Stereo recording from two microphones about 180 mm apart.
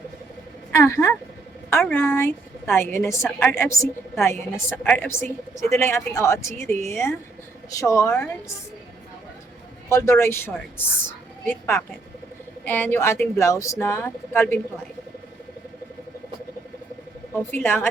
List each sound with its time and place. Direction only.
0.7 s speech: 15° left (ahead or behind)
9.9 s speech: 15° left (ahead or behind)
17.5 s speech: 10° left (ahead or behind)